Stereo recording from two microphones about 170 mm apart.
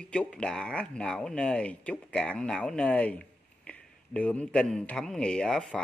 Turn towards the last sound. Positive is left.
turn(degrees=5)  # may be behind; listen again after turning